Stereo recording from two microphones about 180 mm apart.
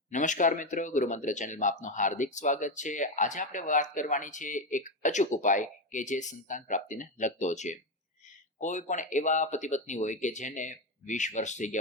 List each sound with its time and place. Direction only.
0.1 s speech: 45° left (ahead or behind)